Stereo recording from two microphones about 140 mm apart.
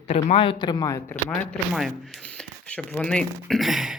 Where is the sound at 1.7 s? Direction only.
Centre (ahead or behind).